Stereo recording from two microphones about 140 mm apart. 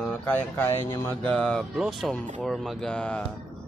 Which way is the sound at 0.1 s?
15° left (ahead or behind).